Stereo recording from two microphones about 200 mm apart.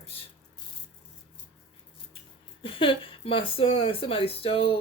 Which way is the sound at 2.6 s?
25° left (ahead or behind).